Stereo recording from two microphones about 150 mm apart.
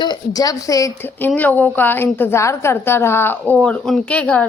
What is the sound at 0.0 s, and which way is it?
A woman's voice, 25° left (ahead or behind).